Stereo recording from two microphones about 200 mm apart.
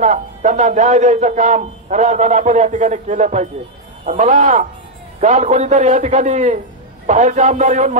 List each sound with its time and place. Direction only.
0.0 s a man's voice: 40° right (ahead or behind)